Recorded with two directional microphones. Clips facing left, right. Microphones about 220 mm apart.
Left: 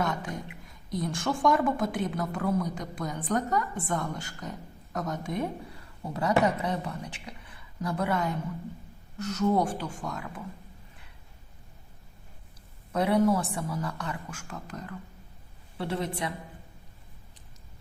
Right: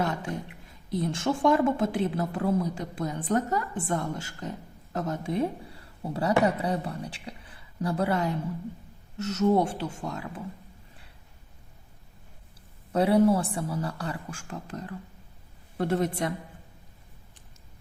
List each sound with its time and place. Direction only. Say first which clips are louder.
0.0 s a sound: right 1 dB; 30° right (ahead or behind)
0.7 s a woman's voice: right 3 dB; 30° right (ahead or behind)
12.9 s a woman's voice: right 3 dB; 30° right (ahead or behind)
15.8 s a woman's voice: right 5 dB; 45° right (ahead or behind)